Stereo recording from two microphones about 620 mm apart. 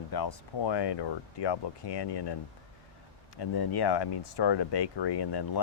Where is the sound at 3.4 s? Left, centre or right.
Left.